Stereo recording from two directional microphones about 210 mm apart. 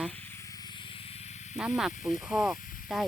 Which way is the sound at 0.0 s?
5° left (ahead or behind).